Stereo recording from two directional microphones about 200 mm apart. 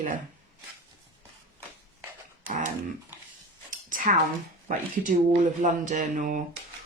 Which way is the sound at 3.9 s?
40° right (ahead or behind).